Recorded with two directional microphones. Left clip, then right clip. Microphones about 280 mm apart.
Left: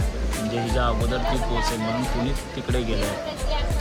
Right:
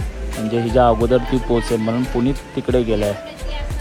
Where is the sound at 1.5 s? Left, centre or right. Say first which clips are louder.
Right 8 dB; right.